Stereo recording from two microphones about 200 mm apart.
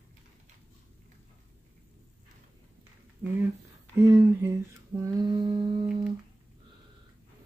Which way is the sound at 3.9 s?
10° right (ahead or behind).